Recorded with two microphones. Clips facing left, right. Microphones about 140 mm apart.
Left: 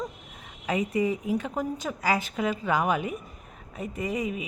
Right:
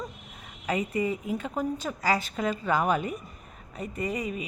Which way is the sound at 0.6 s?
15° left (ahead or behind).